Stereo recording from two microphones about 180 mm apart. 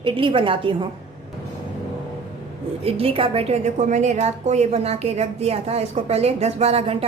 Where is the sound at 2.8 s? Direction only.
30° right (ahead or behind).